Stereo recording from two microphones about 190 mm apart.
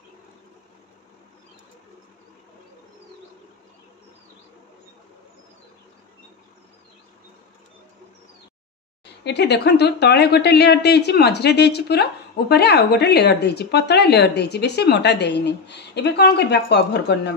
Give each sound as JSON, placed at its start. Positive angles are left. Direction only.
{"t": 9.2, "sound": "speech", "side_deg": 65}